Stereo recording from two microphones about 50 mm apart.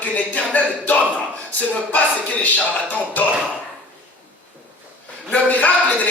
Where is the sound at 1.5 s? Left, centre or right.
Left.